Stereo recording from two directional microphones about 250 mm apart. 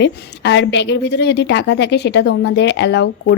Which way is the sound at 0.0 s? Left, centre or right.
Left.